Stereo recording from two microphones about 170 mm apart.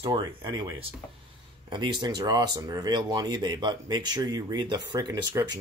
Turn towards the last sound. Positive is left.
turn(degrees=-25)  # may be behind; listen again after turning